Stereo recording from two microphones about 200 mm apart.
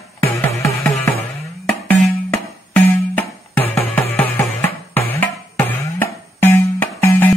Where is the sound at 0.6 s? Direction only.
15° left (ahead or behind).